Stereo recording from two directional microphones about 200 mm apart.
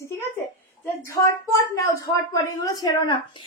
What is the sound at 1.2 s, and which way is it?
A child's voice, 15° left (ahead or behind).